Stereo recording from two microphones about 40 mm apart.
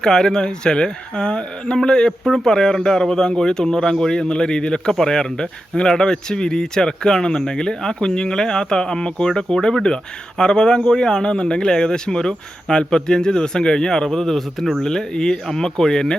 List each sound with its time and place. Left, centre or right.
0.0 s speech: centre
2.2 s speech: centre
14.8 s speech: centre